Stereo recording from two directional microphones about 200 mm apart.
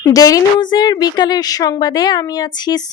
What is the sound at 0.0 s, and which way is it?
Speech, 15° left (ahead or behind).